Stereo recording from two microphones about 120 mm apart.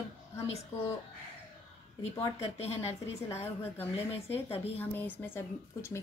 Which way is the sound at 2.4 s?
60° left (ahead or behind).